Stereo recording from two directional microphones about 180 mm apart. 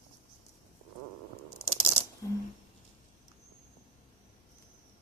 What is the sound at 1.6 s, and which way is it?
Rattle, 10° left (ahead or behind).